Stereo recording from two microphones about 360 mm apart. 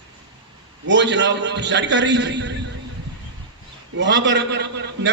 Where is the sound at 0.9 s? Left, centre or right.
Right.